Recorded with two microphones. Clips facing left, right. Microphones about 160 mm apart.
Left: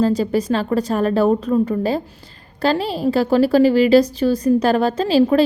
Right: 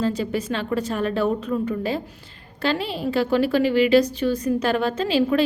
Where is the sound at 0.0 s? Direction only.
35° left (ahead or behind).